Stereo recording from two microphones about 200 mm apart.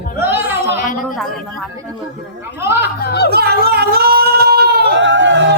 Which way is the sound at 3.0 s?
55° left (ahead or behind).